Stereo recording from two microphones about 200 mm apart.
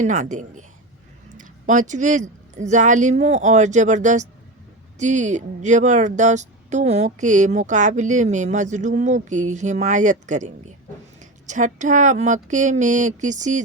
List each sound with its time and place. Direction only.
0.0 s speech: 40° right (ahead or behind)